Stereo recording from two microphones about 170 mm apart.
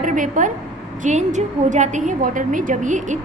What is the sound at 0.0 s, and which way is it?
A woman's voice, 50° right (ahead or behind).